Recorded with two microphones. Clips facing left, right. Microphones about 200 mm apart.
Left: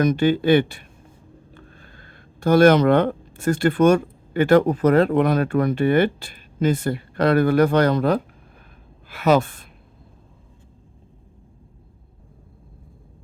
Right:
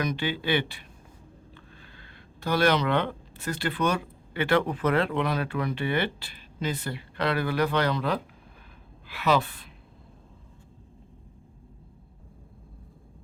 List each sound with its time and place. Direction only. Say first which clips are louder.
0.0 s speech: left 11 dB; 45° left (ahead or behind)